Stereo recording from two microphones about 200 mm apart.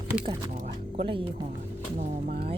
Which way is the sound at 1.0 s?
25° right (ahead or behind).